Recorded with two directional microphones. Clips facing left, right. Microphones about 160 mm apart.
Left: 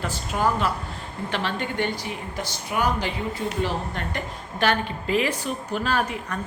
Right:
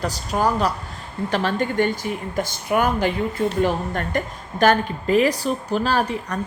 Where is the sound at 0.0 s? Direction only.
40° right (ahead or behind).